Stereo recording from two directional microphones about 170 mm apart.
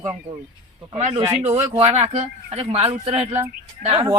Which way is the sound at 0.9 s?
40° right (ahead or behind).